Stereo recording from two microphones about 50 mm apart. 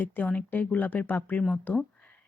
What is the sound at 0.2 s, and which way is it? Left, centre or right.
Speech, left.